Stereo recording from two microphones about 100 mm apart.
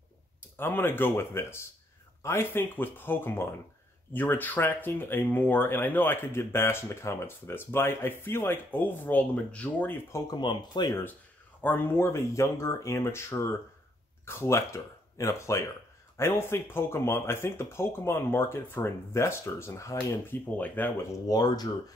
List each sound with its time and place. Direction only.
0.6 s speech: 20° left (ahead or behind)
10.1 s speech: 40° left (ahead or behind)
11.6 s speech: 20° left (ahead or behind)
21.1 s speech: 40° left (ahead or behind)